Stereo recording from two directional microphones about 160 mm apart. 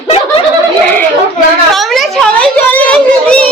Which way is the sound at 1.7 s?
Centre (ahead or behind).